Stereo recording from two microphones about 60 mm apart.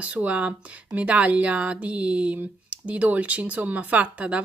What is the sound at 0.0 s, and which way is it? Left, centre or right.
Speech, right.